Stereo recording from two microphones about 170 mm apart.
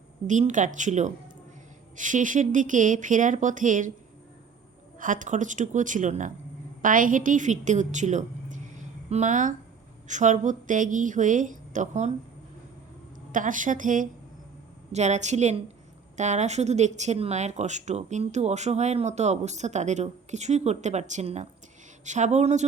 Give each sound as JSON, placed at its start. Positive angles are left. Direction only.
{"t": 0.3, "sound": "a woman's voice", "side_deg": -45}
{"t": 4.9, "sound": "a woman's voice", "side_deg": -50}
{"t": 13.3, "sound": "a woman's voice", "side_deg": -50}